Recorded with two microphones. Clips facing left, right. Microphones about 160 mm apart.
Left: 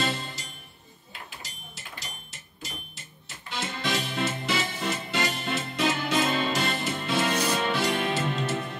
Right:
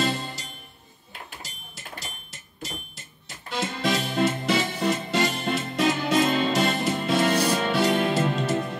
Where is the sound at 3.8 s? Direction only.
45° right (ahead or behind).